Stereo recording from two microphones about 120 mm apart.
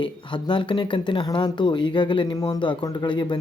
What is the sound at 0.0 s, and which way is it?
Speech, 45° left (ahead or behind).